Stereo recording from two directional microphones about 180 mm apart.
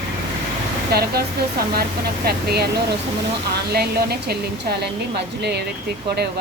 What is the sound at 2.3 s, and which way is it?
Speech, 65° right (ahead or behind).